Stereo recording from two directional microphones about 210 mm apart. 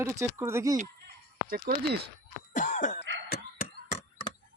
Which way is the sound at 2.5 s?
40° left (ahead or behind).